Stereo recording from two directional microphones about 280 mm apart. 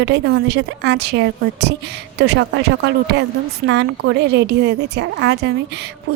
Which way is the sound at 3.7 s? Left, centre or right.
Right.